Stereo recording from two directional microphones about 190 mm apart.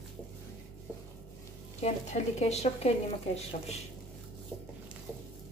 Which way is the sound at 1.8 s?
35° left (ahead or behind).